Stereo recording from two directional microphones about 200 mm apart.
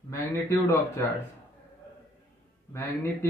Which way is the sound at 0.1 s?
15° left (ahead or behind).